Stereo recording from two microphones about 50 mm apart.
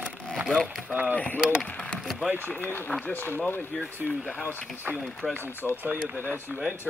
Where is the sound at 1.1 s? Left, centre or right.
Left.